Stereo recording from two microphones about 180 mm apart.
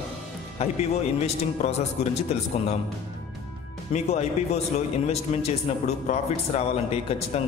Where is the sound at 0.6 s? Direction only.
35° left (ahead or behind).